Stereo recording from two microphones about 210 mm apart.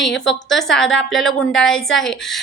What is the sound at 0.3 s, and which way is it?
A woman's voice, centre (ahead or behind).